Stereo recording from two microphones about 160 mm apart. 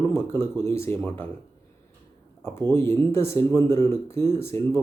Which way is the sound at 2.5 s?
15° left (ahead or behind).